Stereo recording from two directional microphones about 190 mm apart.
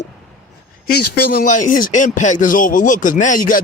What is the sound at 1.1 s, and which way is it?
Speech, 55° left (ahead or behind).